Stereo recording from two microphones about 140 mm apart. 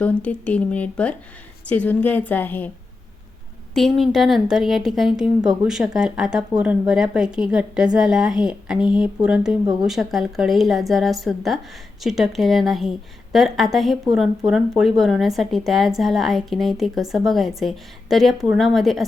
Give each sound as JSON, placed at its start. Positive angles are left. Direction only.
{"t": 0.0, "sound": "a woman's voice", "side_deg": 10}
{"t": 3.8, "sound": "speech", "side_deg": 0}